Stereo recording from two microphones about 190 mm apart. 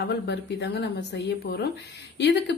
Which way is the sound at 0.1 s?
60° left (ahead or behind).